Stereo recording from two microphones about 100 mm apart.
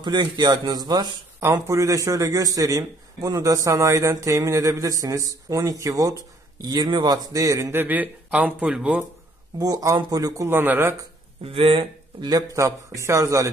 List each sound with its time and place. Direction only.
0.0 s a man's voice: 50° right (ahead or behind)
6.6 s speech: 45° right (ahead or behind)
7.3 s a man's voice: 35° right (ahead or behind)
7.8 s speech: 15° right (ahead or behind)
9.6 s a man's voice: 35° right (ahead or behind)
11.4 s speech: 65° right (ahead or behind)
12.3 s a man's voice: 35° right (ahead or behind)